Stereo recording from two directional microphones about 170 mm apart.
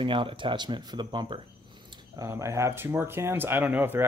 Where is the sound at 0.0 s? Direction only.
30° right (ahead or behind).